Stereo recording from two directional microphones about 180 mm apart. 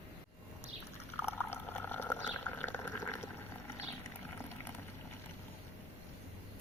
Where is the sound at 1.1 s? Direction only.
10° left (ahead or behind).